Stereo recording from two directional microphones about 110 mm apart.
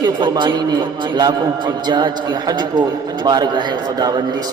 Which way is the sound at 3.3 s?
40° right (ahead or behind).